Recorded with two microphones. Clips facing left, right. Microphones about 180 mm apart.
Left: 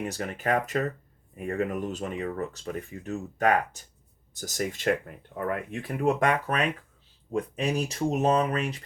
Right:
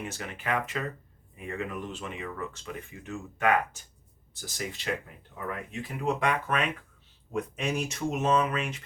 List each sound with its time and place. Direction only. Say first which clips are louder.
0.0 s speech: left 6 dB; 40° left (ahead or behind)
5.3 s speech: left 6 dB; 55° left (ahead or behind); by 8.8 s 40° left (ahead or behind)